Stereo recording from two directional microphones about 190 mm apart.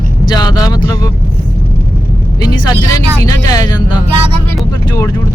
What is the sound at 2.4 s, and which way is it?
Vehicle, 20° left (ahead or behind).